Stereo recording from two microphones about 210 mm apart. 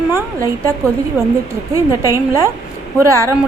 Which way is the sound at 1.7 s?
15° right (ahead or behind).